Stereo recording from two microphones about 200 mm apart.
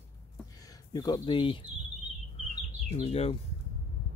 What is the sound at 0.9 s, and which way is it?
Speech, 20° left (ahead or behind).